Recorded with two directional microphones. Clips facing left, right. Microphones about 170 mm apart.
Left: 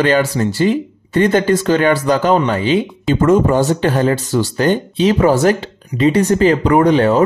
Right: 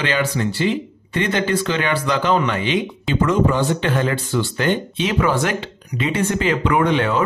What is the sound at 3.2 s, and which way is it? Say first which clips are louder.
Speech: left 5 dB; 45° left (ahead or behind).